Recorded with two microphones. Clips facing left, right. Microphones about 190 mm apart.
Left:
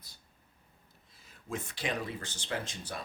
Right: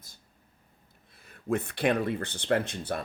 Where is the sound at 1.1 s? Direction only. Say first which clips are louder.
Right 10 dB; 60° right (ahead or behind).